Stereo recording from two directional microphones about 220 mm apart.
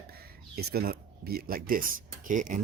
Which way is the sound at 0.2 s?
45° right (ahead or behind).